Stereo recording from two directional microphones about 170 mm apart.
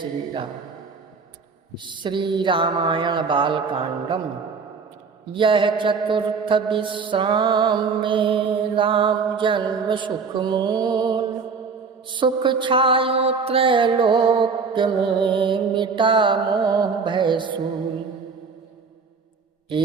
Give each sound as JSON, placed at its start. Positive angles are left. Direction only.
{"t": 1.7, "sound": "mantra", "side_deg": -30}
{"t": 5.3, "sound": "mantra", "side_deg": -30}